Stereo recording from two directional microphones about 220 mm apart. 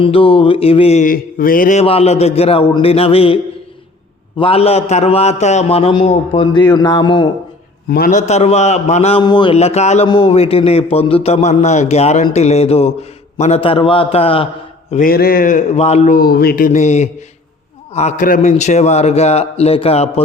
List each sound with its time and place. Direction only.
0.0 s a man's voice: 25° left (ahead or behind)
7.9 s a man's voice: 45° left (ahead or behind)
8.3 s a man's voice: 30° left (ahead or behind)
14.8 s a man's voice: 35° left (ahead or behind)